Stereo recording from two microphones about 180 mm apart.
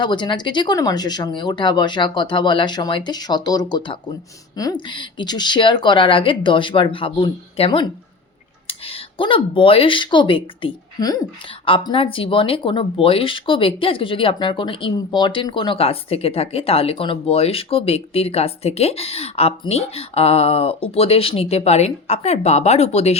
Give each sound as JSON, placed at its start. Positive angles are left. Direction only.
{"t": 0.0, "sound": "speech", "side_deg": 25}